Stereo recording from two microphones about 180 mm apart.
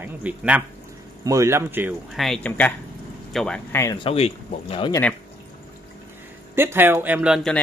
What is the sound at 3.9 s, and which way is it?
Speech, 30° left (ahead or behind).